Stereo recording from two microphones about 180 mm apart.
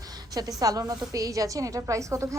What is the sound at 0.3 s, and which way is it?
A woman's voice, 20° right (ahead or behind).